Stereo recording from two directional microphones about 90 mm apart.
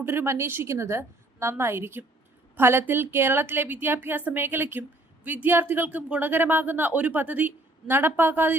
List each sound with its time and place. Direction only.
0.0 s a woman's voice: 25° right (ahead or behind)